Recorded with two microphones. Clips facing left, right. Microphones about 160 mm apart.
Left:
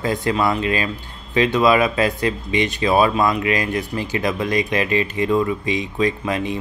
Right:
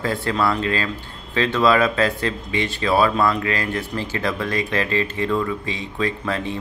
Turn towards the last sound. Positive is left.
turn(degrees=15)  # may be behind; listen again after turning